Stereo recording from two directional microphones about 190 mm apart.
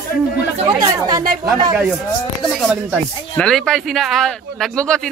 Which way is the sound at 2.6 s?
Centre (ahead or behind).